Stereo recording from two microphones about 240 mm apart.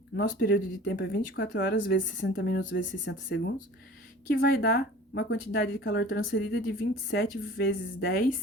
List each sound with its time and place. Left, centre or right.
0.2 s speech: left